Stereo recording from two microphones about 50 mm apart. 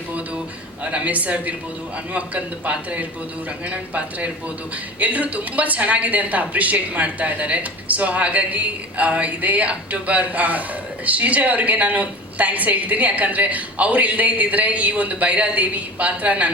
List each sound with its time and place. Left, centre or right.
0.9 s speech: right